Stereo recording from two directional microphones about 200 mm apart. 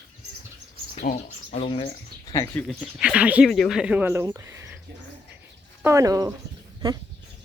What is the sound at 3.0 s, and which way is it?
Speech, 5° right (ahead or behind).